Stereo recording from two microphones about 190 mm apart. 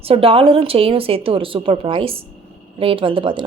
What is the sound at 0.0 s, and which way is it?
Speech, 30° right (ahead or behind).